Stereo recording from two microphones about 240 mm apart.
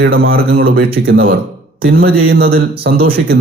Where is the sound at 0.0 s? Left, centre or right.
Right.